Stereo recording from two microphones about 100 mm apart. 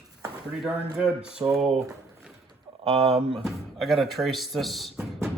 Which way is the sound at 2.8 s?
80° right.